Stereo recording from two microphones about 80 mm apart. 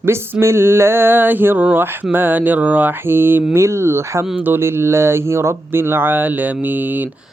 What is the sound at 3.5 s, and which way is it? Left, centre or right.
Speech, right.